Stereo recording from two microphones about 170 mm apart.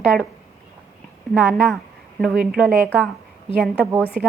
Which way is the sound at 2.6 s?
5° right (ahead or behind).